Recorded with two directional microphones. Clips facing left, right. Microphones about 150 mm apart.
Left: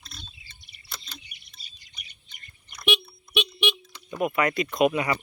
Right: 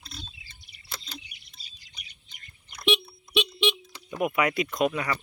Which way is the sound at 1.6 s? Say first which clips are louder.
Even; 90° right.